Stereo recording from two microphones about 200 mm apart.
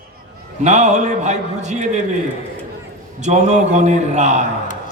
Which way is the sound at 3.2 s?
35° right (ahead or behind).